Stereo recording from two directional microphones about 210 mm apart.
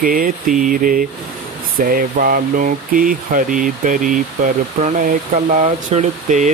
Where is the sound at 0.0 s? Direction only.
40° right (ahead or behind).